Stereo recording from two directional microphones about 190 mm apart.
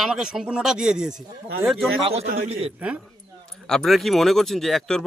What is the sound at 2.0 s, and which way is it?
Speech, 30° right (ahead or behind).